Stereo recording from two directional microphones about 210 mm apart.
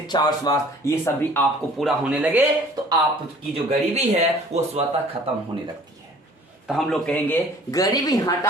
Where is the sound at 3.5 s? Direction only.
30° right (ahead or behind).